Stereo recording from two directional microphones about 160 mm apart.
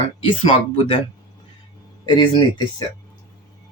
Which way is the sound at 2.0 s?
25° left (ahead or behind).